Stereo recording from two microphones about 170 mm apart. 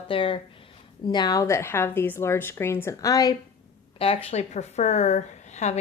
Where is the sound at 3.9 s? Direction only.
35° left (ahead or behind).